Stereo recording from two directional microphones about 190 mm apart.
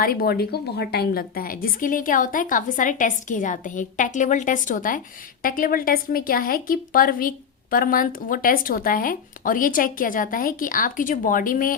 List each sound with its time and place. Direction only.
0.0 s a woman's voice: 55° left (ahead or behind)